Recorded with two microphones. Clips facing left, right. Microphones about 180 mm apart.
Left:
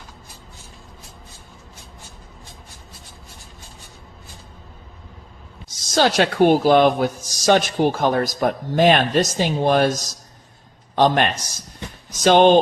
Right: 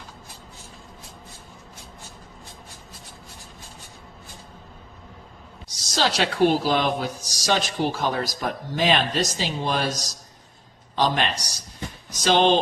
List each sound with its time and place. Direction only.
5.7 s a man's voice: 50° left (ahead or behind)